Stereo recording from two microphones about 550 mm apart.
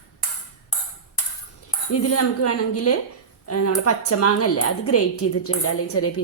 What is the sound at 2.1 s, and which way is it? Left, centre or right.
A woman's voice, left.